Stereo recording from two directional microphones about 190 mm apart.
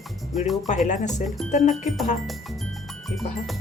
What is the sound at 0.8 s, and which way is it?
Music, 40° left (ahead or behind).